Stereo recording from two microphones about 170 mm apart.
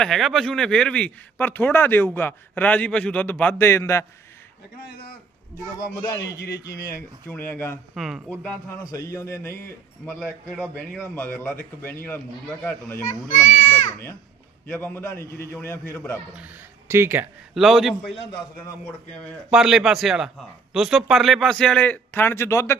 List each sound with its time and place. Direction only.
0.0 s speech: centre (ahead or behind); by 4.0 s 15° left (ahead or behind)
5.9 s speech: 20° left (ahead or behind)
7.9 s speech: centre (ahead or behind)
8.8 s speech: 20° left (ahead or behind)
10.2 s speech: 5° left (ahead or behind)
13.1 s a child's voice: 45° left (ahead or behind)
14.7 s speech: 10° left (ahead or behind)
16.3 s speech: 10° right (ahead or behind)
17.5 s speech: centre (ahead or behind)
19.5 s speech: 5° right (ahead or behind); by 22.8 s 15° left (ahead or behind)